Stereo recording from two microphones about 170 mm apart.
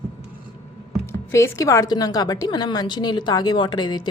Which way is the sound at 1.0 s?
15° left (ahead or behind).